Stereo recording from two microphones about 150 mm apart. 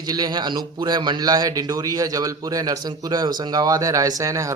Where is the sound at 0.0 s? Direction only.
25° right (ahead or behind).